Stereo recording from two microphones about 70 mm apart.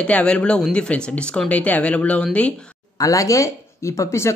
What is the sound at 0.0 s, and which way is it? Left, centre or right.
Speech, centre.